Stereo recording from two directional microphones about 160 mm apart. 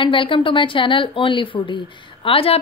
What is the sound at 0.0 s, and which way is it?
A woman's voice, 30° left (ahead or behind).